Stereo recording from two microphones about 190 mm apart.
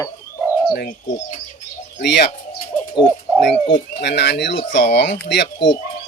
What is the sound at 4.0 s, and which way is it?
Speech, 60° left (ahead or behind).